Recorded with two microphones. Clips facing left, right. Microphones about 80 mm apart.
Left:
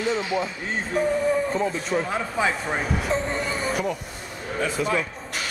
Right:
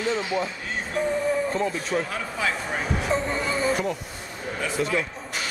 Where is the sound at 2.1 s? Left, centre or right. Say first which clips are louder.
Left 3 dB; left.